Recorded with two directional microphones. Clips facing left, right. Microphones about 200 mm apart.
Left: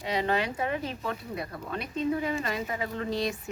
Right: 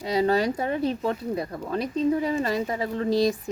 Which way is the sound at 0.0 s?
40° right (ahead or behind).